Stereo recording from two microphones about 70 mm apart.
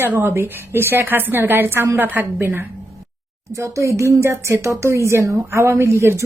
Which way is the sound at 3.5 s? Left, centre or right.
Right.